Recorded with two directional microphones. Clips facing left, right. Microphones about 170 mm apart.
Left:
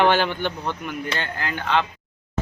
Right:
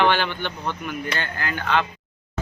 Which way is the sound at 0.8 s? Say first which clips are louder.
Even; 25° left (ahead or behind).